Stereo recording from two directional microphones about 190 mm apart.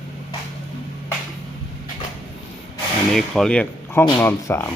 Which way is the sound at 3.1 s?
Centre (ahead or behind).